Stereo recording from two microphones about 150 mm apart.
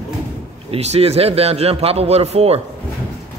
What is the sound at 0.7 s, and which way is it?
A man's voice, 45° right (ahead or behind).